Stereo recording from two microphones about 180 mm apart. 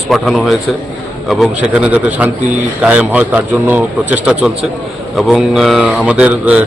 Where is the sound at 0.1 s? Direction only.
Centre (ahead or behind).